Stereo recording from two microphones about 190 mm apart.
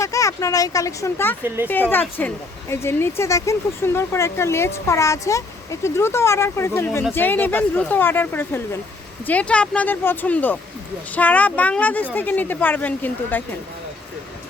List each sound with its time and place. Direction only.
0.0 s speech: 15° left (ahead or behind)